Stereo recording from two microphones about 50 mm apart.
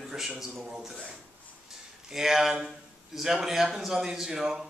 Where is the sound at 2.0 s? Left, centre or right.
Centre.